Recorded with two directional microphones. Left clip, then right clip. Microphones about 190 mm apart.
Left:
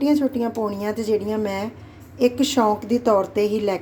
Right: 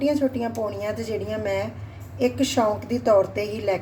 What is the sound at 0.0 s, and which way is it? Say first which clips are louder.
A woman's voice: left 2 dB; 35° left (ahead or behind).